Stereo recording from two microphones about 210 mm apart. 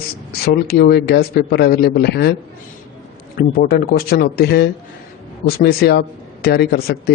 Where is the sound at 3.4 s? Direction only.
45° left (ahead or behind).